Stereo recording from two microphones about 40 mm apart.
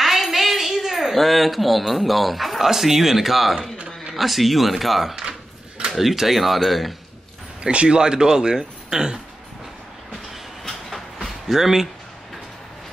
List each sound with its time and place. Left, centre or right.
0.0 s a sound: centre
1.1 s speech: centre
7.6 s speech: right
10.6 s train: centre
11.4 s speech: centre